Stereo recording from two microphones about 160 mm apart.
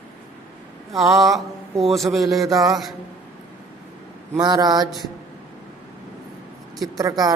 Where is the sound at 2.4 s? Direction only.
20° right (ahead or behind).